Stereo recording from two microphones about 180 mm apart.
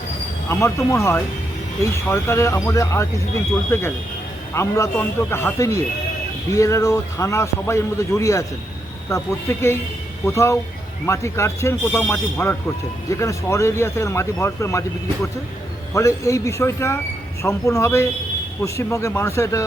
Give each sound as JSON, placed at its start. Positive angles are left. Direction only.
{"t": 0.4, "sound": "speech", "side_deg": 15}